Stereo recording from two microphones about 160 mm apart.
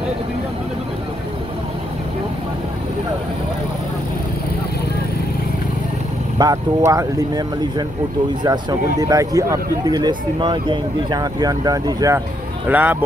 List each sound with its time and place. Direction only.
6.3 s speech: 20° right (ahead or behind)
12.6 s speech: 10° right (ahead or behind)